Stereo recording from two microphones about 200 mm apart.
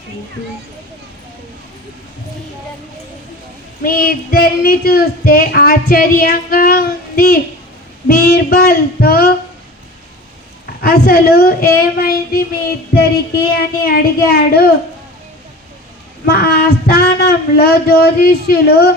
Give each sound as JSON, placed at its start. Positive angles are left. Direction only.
{"t": 3.8, "sound": "speech", "side_deg": 45}
{"t": 10.8, "sound": "speech", "side_deg": 50}
{"t": 13.6, "sound": "speech", "side_deg": 50}
{"t": 16.2, "sound": "speech", "side_deg": 50}